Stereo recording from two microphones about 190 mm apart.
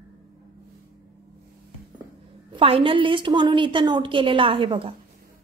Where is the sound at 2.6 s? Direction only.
30° right (ahead or behind).